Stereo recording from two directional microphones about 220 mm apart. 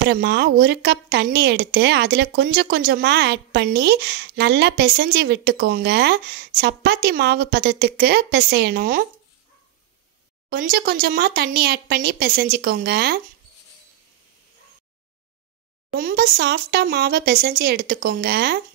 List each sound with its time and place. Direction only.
0.1 s a woman's voice: 50° right (ahead or behind)
10.5 s a woman's voice: 45° right (ahead or behind)
16.0 s a woman's voice: 45° right (ahead or behind)